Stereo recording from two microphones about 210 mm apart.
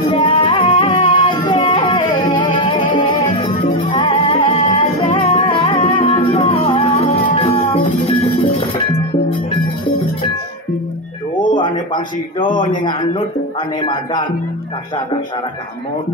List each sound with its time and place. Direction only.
0.1 s music: 25° left (ahead or behind)
11.5 s a man's voice: 20° left (ahead or behind)